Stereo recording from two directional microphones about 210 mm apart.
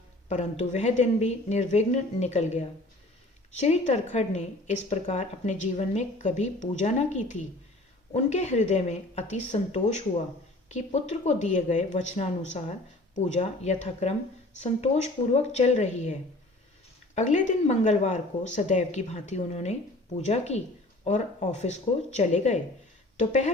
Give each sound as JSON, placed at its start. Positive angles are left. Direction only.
{"t": 0.3, "sound": "a woman's voice", "side_deg": 35}
{"t": 17.2, "sound": "a woman's voice", "side_deg": 35}